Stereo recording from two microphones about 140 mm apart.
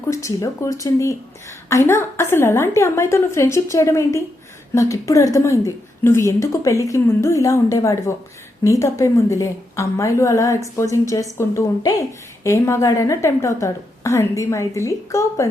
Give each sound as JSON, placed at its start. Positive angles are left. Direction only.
{"t": 0.1, "sound": "a woman's voice", "side_deg": 20}